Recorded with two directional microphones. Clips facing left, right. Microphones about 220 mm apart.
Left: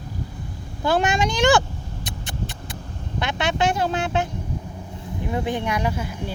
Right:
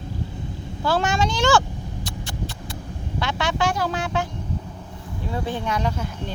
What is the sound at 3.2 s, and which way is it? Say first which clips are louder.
Speech: left 1 dB; 20° left (ahead or behind).